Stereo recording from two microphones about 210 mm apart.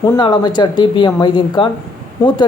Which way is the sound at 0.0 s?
20° left (ahead or behind).